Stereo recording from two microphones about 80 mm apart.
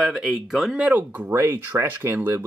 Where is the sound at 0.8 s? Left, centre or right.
Centre.